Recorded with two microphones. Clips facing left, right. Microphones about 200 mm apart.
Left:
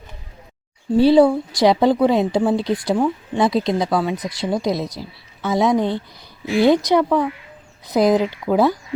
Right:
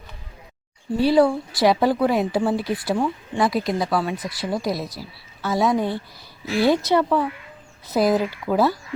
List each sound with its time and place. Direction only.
0.9 s a woman's voice: 25° left (ahead or behind)